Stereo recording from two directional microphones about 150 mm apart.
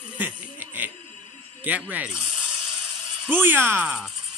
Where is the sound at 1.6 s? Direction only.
10° right (ahead or behind).